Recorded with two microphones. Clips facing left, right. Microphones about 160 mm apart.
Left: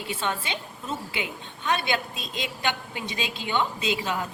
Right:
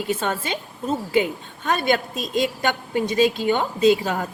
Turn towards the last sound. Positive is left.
turn(degrees=-45)  # may be behind; listen again after turning